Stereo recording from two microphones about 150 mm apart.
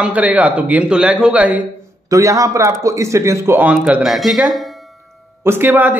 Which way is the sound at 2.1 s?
20° right (ahead or behind).